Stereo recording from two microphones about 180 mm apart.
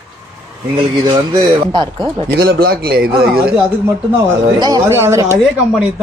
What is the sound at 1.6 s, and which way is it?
Speech, 25° right (ahead or behind).